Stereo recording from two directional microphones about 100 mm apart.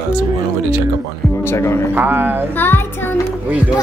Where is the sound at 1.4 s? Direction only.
25° left (ahead or behind).